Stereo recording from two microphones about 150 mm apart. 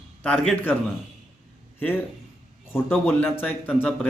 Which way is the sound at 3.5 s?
5° right (ahead or behind).